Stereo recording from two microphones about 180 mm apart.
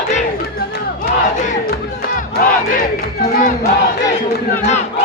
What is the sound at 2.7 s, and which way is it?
Crowd, 55° left (ahead or behind).